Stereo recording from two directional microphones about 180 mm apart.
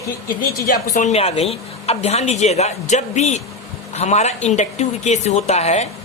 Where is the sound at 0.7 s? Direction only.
45° left (ahead or behind).